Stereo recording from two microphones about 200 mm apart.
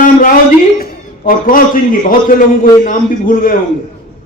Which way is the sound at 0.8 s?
45° left (ahead or behind).